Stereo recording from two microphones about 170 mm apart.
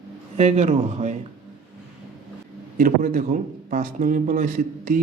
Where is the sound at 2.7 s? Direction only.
50° right (ahead or behind).